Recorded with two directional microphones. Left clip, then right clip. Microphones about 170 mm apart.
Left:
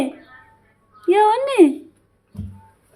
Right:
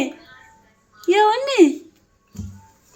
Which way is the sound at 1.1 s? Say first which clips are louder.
Left 1 dB; 10° left (ahead or behind).